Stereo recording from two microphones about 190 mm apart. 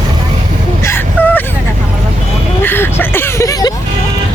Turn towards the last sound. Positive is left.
turn(degrees=20)  # may be behind; listen again after turning